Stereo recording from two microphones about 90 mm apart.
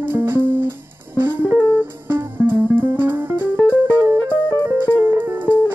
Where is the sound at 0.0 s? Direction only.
25° right (ahead or behind).